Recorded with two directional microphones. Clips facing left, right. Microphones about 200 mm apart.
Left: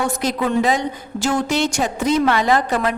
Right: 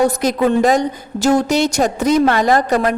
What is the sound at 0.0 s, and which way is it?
A woman's voice, 40° right (ahead or behind).